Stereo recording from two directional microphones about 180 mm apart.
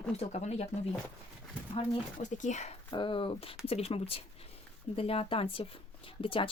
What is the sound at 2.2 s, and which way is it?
Speech, 40° left (ahead or behind).